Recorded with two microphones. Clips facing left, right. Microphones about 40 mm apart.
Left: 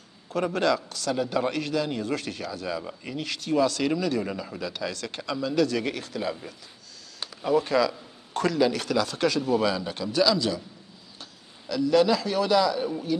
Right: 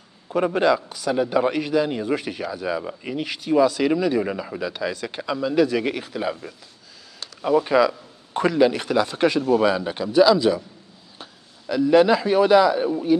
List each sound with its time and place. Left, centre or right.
0.3 s a man's voice: centre
7.4 s a man's voice: centre